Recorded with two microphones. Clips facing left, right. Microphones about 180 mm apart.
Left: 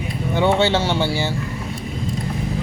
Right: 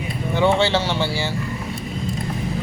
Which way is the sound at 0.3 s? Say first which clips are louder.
Left 1 dB; 20° left (ahead or behind).